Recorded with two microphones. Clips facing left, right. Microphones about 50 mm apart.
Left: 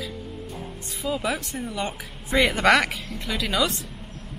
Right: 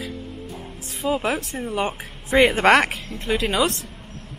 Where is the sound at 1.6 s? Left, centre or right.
Right.